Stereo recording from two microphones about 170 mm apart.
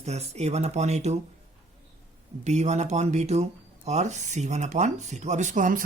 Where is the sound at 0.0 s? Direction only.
40° right (ahead or behind).